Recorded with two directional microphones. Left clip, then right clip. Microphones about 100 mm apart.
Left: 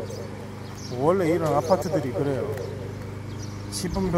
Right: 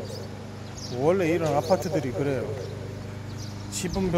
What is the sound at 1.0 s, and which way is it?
Speech, 5° right (ahead or behind).